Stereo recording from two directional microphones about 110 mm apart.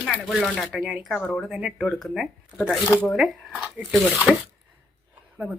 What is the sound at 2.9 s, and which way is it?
Speech, 15° left (ahead or behind).